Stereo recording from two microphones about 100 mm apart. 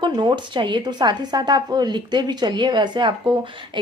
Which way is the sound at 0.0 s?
50° right (ahead or behind).